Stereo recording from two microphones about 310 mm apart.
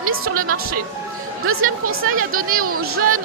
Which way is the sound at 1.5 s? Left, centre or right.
Right.